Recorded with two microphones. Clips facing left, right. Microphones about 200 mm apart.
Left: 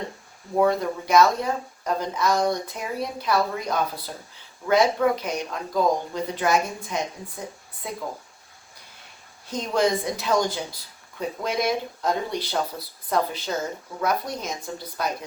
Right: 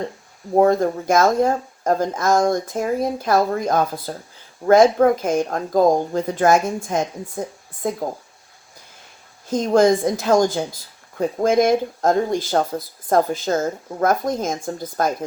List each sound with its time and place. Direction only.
0.5 s speech: 45° right (ahead or behind)
9.5 s speech: 45° right (ahead or behind)